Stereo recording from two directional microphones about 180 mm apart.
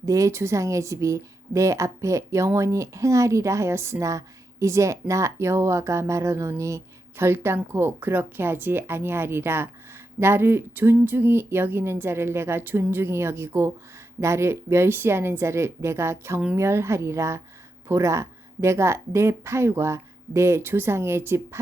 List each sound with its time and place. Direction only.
0.0 s speech: 20° right (ahead or behind)